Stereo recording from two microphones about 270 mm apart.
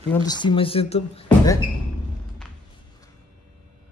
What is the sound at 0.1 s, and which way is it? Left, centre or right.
Speech, centre.